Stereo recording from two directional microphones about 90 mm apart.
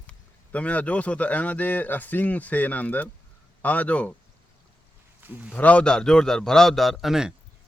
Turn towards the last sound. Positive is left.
turn(degrees=-5)  # may be behind; listen again after turning